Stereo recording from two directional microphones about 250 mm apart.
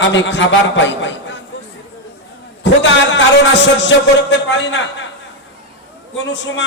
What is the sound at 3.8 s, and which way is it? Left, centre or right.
A man's voice, left.